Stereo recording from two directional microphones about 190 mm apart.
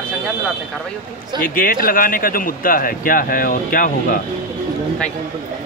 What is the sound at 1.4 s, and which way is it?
Speech, 50° left (ahead or behind).